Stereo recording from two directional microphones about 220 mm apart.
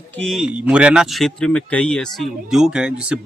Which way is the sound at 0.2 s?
Centre (ahead or behind).